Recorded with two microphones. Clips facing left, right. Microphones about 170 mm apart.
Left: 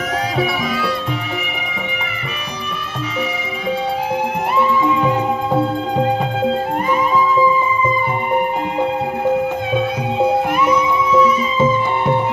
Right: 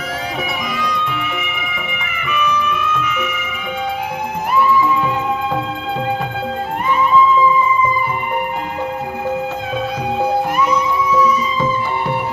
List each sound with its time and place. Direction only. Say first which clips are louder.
0.9 s music: left 1 dB; 35° left (ahead or behind)
2.3 s music: right 8 dB; 35° left (ahead or behind)
4.5 s music: right 2 dB; 25° left (ahead or behind)
6.8 s music: right 4 dB; 35° left (ahead or behind)